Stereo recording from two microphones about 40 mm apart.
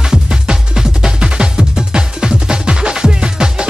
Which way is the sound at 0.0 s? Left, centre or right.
Centre.